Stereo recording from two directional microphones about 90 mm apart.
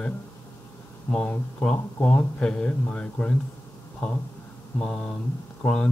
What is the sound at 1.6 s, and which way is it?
Speech, 10° left (ahead or behind).